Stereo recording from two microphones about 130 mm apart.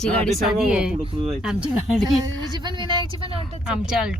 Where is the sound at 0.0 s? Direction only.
10° left (ahead or behind).